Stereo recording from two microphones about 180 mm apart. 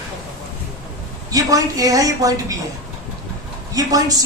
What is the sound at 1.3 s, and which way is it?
A woman's voice, 20° right (ahead or behind).